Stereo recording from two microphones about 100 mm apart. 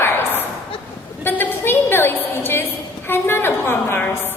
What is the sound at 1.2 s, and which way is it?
A woman's voice, 20° left (ahead or behind).